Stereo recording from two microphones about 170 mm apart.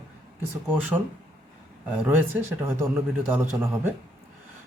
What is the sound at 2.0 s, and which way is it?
Speech, 15° right (ahead or behind).